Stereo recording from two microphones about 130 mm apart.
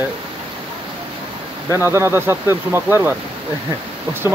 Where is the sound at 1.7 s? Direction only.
20° right (ahead or behind).